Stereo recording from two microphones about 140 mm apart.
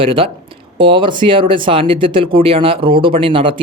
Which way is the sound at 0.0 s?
40° right (ahead or behind).